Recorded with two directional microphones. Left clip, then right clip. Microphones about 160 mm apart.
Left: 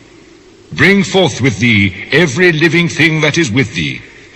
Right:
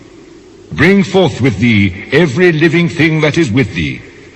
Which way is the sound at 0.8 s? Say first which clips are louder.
Even; 25° left (ahead or behind).